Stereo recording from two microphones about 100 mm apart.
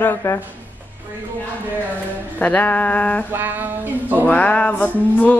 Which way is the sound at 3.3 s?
20° right (ahead or behind).